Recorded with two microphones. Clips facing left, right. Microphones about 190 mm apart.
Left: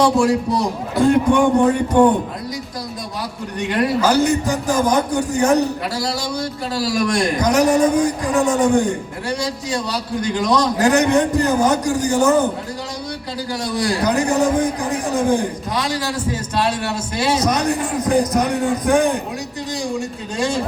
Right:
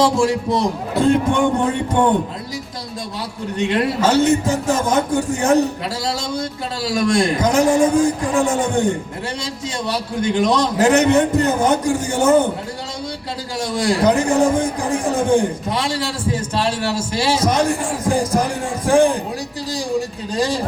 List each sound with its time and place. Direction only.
0.2 s a man's voice: 25° right (ahead or behind)
3.6 s a man's voice: 25° right (ahead or behind)
13.6 s a man's voice: 25° right (ahead or behind)